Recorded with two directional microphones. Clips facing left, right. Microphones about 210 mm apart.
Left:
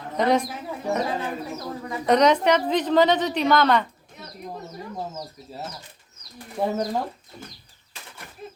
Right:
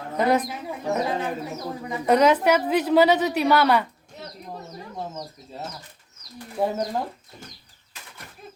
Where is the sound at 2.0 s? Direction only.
5° right (ahead or behind).